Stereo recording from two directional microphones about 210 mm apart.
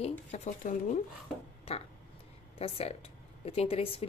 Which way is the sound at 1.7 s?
30° left (ahead or behind).